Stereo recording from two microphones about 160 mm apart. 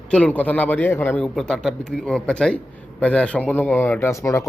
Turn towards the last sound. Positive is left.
turn(degrees=20)  # may be behind; listen again after turning